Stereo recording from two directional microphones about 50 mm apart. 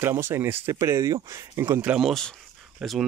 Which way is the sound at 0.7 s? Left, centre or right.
Right.